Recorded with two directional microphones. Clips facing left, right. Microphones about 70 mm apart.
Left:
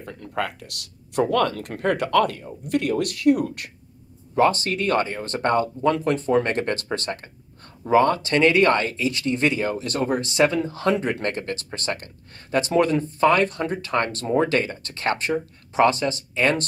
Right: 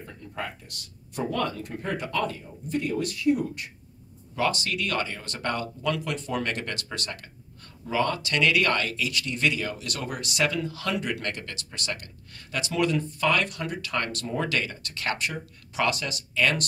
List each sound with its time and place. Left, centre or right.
0.0 s speech: left
4.4 s speech: left